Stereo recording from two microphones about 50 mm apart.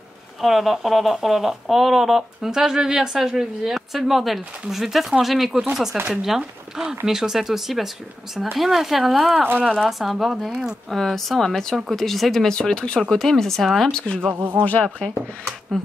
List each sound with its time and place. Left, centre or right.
0.4 s speech: centre
10.9 s speech: centre
13.1 s speech: centre
13.9 s speech: centre
14.3 s speech: right